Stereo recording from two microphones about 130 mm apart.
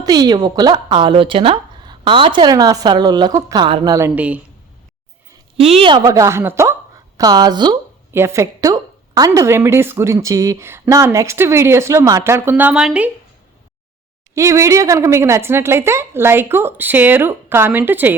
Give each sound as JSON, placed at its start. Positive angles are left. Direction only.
{"t": 0.0, "sound": "speech", "side_deg": -30}
{"t": 4.0, "sound": "a woman's voice", "side_deg": -10}
{"t": 5.5, "sound": "a woman's voice", "side_deg": -50}
{"t": 6.1, "sound": "a woman's voice", "side_deg": -20}
{"t": 7.2, "sound": "speech", "side_deg": -30}
{"t": 8.1, "sound": "a woman's voice", "side_deg": -20}
{"t": 14.3, "sound": "a woman's voice", "side_deg": -25}